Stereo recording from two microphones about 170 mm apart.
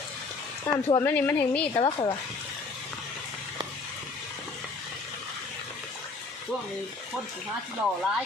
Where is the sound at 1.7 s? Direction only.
30° left (ahead or behind).